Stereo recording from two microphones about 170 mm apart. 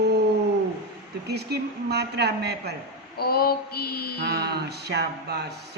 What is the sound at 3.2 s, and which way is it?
Mantra, 65° left (ahead or behind).